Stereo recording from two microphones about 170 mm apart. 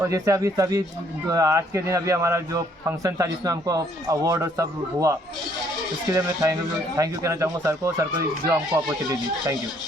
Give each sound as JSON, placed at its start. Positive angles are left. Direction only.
{"t": 0.0, "sound": "a man's voice", "side_deg": -20}
{"t": 6.1, "sound": "a man's voice", "side_deg": -20}